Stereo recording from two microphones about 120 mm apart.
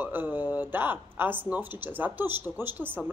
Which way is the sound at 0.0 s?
15° right (ahead or behind).